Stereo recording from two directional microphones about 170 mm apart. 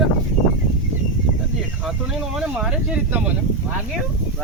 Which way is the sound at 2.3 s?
5° right (ahead or behind).